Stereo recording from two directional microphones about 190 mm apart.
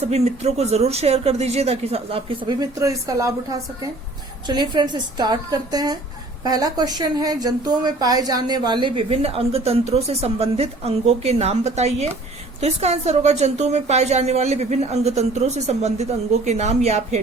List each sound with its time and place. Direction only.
0.0 s a woman's voice: 35° right (ahead or behind); by 3.3 s 15° right (ahead or behind)
4.4 s a woman's voice: 25° right (ahead or behind)